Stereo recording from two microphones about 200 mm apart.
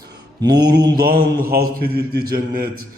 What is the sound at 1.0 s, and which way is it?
A man's voice, 50° right (ahead or behind).